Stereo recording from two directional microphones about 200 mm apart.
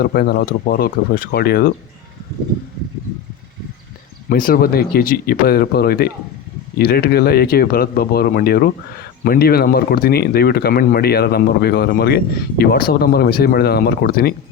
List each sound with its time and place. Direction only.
0.0 s speech: 50° left (ahead or behind)
4.3 s speech: 45° left (ahead or behind)